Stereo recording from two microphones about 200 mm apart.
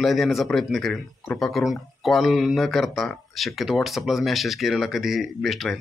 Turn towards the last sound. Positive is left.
turn(degrees=0)  # may be behind; listen again after turning